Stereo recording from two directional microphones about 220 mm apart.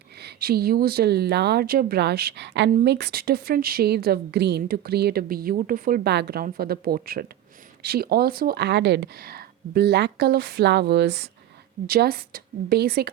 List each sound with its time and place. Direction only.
0.2 s a woman's voice: 45° right (ahead or behind)